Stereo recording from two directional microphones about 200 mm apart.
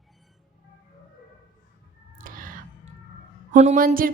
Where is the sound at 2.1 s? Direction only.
45° right (ahead or behind).